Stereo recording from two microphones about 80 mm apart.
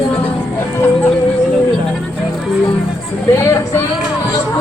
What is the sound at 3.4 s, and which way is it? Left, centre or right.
Speech, left.